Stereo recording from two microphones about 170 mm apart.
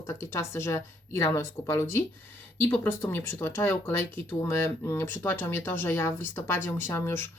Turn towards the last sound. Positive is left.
turn(degrees=15)  # may be behind; listen again after turning